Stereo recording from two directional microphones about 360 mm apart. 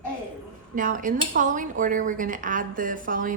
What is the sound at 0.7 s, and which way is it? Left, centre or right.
Speech, right.